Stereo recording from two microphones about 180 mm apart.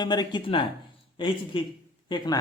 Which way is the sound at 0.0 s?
25° left (ahead or behind).